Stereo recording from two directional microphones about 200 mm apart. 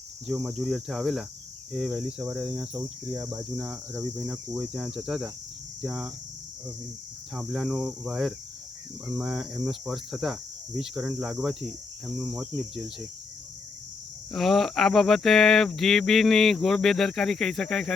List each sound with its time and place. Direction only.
0.3 s speech: centre (ahead or behind)
3.2 s speech: 15° right (ahead or behind)
3.6 s speech: 5° right (ahead or behind)
7.3 s speech: centre (ahead or behind)
14.3 s speech: centre (ahead or behind)